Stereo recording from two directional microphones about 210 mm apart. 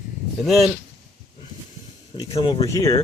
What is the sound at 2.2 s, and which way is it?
Speech, 20° left (ahead or behind).